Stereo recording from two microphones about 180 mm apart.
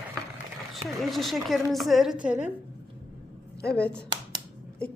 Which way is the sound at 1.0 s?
Centre (ahead or behind).